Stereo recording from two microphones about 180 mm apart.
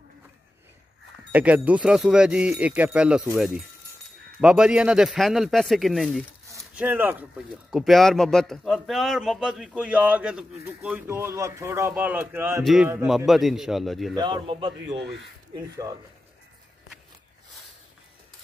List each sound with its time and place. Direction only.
1.3 s a man's voice: 10° right (ahead or behind)
7.7 s a man's voice: centre (ahead or behind)
14.1 s a man's voice: 25° right (ahead or behind)